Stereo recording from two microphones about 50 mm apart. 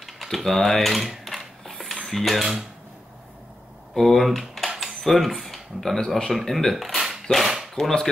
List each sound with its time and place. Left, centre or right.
0.0 s a sound: centre
2.0 s speech: centre
3.9 s speech: centre
4.6 s typing: centre
5.0 s speech: centre
7.7 s speech: centre